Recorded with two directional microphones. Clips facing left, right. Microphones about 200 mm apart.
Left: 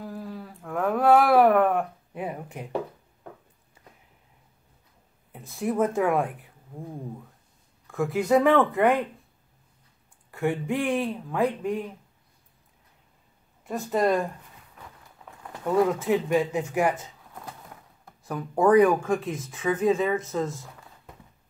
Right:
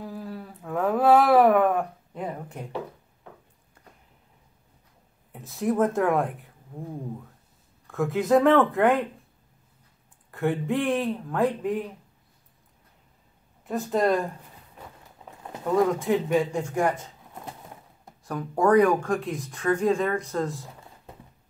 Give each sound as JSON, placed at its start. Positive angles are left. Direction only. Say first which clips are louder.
{"t": 0.0, "sound": "a sound", "louder": "even", "side_deg": 0}
{"t": 5.3, "sound": "speech", "louder": "right 2 dB", "side_deg": 0}
{"t": 10.3, "sound": "speech", "louder": "right 1 dB", "side_deg": 0}
{"t": 13.7, "sound": "speech", "louder": "right 1 dB", "side_deg": 0}
{"t": 15.2, "sound": "a sound", "louder": "right 2 dB", "side_deg": -20}
{"t": 15.6, "sound": "speech", "louder": "even", "side_deg": 0}
{"t": 18.2, "sound": "speech", "louder": "left 1 dB", "side_deg": 5}